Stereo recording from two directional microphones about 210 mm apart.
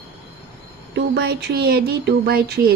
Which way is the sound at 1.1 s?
50° right (ahead or behind).